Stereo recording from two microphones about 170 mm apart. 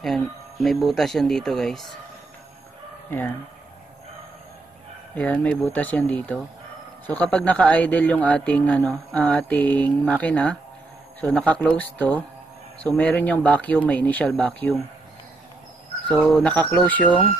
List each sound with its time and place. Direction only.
0.0 s speech: centre (ahead or behind)
5.1 s a man's voice: 10° left (ahead or behind)
16.1 s a man's voice: 10° left (ahead or behind)